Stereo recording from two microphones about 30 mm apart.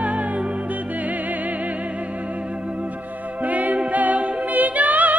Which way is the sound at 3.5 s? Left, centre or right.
Right.